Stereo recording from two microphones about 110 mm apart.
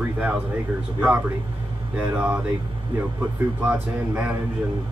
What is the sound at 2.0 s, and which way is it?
Speech, 15° right (ahead or behind).